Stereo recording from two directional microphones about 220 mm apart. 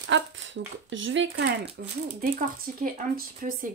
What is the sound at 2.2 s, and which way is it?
Speech, 40° right (ahead or behind).